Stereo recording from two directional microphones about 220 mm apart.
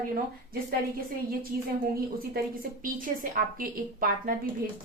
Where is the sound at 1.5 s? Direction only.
45° right (ahead or behind).